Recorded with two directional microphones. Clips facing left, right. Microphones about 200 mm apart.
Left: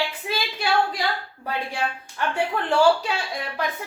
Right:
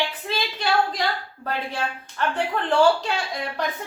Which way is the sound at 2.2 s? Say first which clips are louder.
Even; 10° left (ahead or behind).